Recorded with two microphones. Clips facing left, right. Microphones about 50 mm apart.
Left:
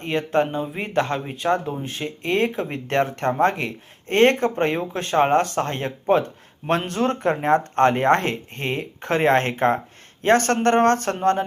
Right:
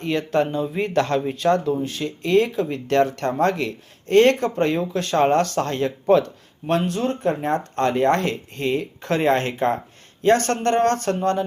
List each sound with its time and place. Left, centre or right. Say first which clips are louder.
0.0 s speech: even; left
0.7 s speech: right 3 dB; centre
1.8 s speech: right 3 dB; left
6.7 s speech: even; left